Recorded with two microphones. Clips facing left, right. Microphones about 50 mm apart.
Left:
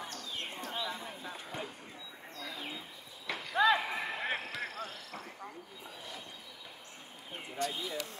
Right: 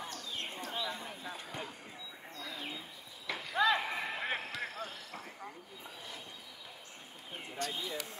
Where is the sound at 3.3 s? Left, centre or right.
Centre.